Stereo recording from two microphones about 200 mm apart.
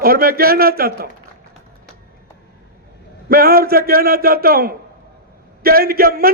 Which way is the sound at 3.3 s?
50° right (ahead or behind).